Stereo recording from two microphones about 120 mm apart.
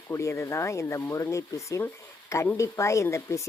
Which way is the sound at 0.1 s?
25° left (ahead or behind).